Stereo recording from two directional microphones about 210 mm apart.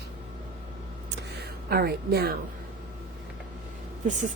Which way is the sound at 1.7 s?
45° right (ahead or behind).